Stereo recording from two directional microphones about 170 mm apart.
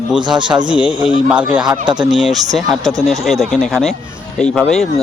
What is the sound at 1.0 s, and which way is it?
Speech, 5° right (ahead or behind).